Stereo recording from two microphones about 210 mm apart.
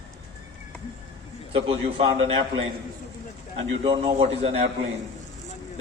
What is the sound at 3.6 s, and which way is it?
A man's voice, 25° right (ahead or behind).